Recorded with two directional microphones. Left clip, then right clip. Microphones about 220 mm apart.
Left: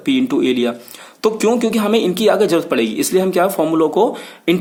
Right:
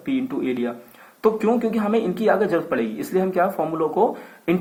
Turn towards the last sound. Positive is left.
turn(degrees=40)  # may be behind; listen again after turning